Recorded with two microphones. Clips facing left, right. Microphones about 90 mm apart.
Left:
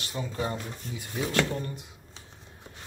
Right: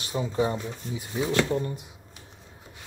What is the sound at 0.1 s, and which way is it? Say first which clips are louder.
Speech: right 6 dB; 15° right (ahead or behind).